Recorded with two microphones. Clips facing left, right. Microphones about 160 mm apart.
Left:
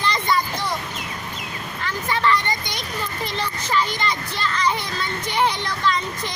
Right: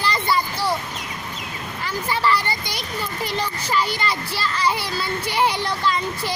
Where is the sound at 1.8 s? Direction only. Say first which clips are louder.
Even; 10° right (ahead or behind).